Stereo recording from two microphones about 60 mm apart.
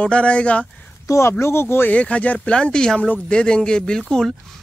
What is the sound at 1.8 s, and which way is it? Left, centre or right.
Speech, left.